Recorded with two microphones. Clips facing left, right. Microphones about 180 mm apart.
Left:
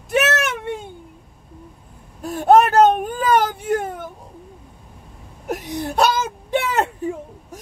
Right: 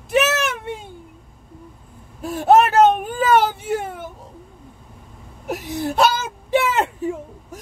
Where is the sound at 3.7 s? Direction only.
5° right (ahead or behind).